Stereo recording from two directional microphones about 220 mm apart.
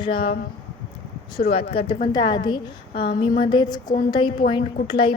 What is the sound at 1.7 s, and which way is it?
Speech, 25° left (ahead or behind).